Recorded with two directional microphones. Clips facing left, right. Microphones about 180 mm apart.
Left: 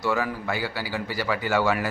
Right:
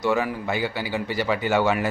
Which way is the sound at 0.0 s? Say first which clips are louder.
Right 3 dB; 20° right (ahead or behind).